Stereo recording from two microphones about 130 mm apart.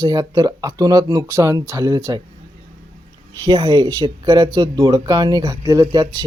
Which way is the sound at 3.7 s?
30° right (ahead or behind).